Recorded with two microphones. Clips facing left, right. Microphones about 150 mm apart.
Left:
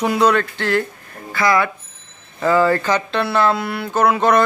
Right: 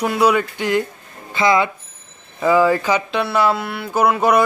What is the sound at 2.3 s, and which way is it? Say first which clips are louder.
Speech: right 1 dB; 10° right (ahead or behind).